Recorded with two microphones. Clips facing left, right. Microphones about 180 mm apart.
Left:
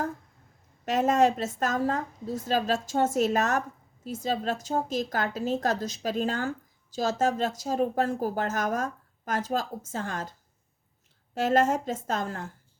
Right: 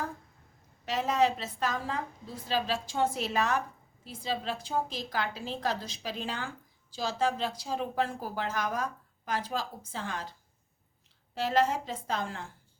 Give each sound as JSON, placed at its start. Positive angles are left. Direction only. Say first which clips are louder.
{"t": 0.9, "sound": "speech", "louder": "left 5 dB", "side_deg": 45}
{"t": 11.3, "sound": "speech", "louder": "left 4 dB", "side_deg": 45}